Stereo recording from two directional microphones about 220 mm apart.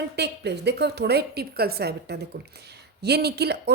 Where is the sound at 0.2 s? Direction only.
50° right (ahead or behind).